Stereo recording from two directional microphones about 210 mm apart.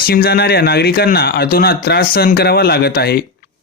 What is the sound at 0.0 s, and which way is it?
Speech, 45° left (ahead or behind).